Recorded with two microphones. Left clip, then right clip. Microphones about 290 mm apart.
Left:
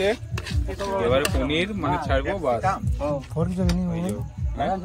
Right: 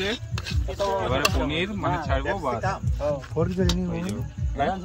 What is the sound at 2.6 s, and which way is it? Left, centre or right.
Speech, right.